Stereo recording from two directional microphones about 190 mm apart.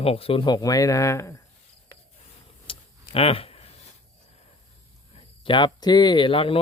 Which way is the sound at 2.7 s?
30° left (ahead or behind).